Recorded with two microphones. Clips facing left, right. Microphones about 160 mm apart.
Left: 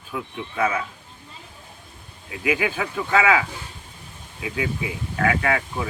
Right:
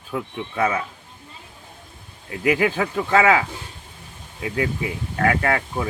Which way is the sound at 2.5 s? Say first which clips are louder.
Right 4 dB; 40° right (ahead or behind).